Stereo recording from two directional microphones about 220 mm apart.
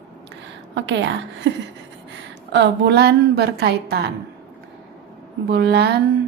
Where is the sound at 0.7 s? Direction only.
55° right (ahead or behind).